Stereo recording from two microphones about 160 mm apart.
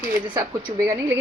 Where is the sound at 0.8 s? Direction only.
15° right (ahead or behind).